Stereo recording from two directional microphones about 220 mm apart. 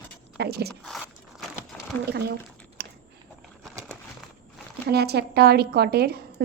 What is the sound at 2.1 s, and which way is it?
Speech, 45° right (ahead or behind).